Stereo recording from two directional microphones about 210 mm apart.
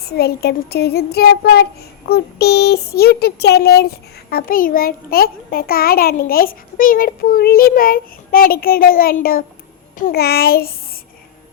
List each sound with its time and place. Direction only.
0.0 s speech: 50° left (ahead or behind)